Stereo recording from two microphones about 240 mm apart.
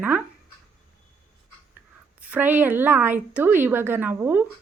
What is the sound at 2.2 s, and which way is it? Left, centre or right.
A woman's voice, centre.